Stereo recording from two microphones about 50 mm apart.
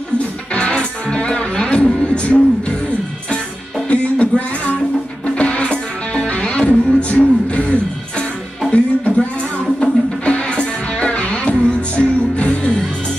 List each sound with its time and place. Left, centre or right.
0.6 s music: centre
3.9 s music: left